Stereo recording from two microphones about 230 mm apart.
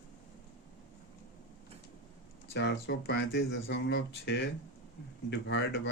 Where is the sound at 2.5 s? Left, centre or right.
Left.